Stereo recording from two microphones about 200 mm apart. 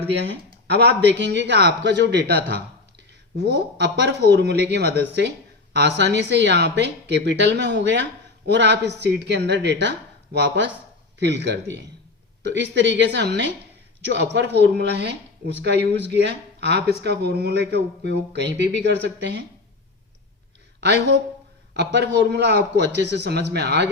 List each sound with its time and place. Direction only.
0.7 s speech: 55° right (ahead or behind)
20.8 s speech: 55° right (ahead or behind)